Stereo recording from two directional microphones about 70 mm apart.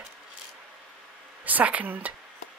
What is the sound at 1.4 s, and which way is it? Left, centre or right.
Speech, right.